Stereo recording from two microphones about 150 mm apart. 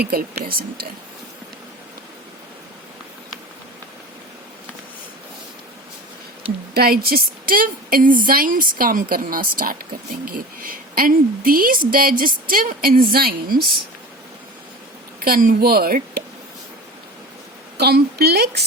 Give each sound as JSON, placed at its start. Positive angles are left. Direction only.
{"t": 0.0, "sound": "speech", "side_deg": -85}
{"t": 6.7, "sound": "a woman's voice", "side_deg": -90}
{"t": 15.2, "sound": "speech", "side_deg": -75}
{"t": 17.7, "sound": "a woman's voice", "side_deg": -90}